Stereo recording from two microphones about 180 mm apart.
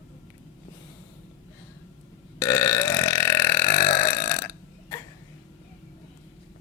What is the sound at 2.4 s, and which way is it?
Burping, 15° left (ahead or behind).